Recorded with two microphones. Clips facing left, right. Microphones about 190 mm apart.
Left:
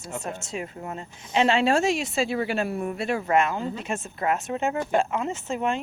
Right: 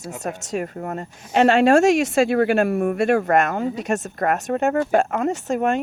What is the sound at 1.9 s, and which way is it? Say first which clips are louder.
Speech: right 8 dB; 75° right (ahead or behind).